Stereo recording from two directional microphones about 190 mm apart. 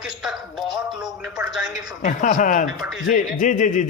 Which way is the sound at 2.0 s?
40° left (ahead or behind).